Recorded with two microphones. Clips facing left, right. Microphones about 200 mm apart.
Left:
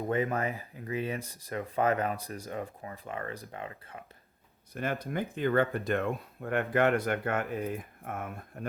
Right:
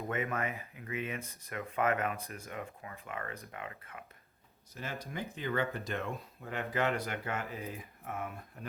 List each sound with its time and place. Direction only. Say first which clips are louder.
0.1 s speech: left 6 dB; 35° left (ahead or behind)
4.7 s speech: left 8 dB; 55° left (ahead or behind)